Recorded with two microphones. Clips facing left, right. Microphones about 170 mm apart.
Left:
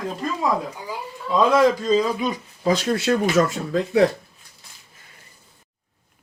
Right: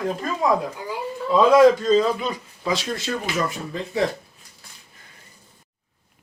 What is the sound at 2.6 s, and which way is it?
Speech, 50° left (ahead or behind).